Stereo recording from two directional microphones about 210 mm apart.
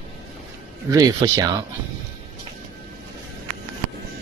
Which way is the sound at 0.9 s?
15° right (ahead or behind).